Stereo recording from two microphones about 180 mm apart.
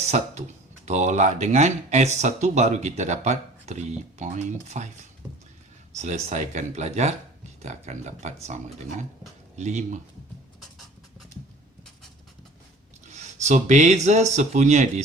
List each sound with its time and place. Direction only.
0.9 s speech: 40° right (ahead or behind)
5.9 s speech: 40° right (ahead or behind)
10.6 s a sound: centre (ahead or behind)
13.1 s speech: 40° right (ahead or behind)